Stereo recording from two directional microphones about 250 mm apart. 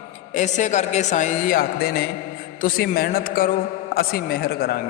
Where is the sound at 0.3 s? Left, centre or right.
Left.